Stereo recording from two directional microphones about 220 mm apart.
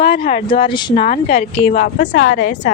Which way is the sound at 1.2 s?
40° left (ahead or behind).